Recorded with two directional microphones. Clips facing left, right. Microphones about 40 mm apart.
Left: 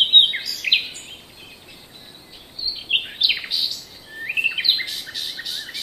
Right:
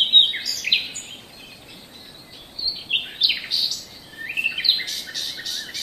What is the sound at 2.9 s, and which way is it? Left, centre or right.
Bird, centre.